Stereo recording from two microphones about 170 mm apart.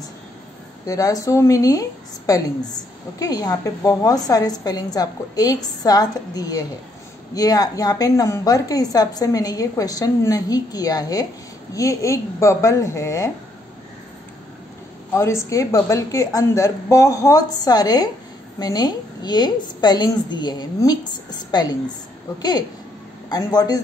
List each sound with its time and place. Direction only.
0.8 s a woman's voice: 20° left (ahead or behind)
15.1 s a woman's voice: 15° left (ahead or behind)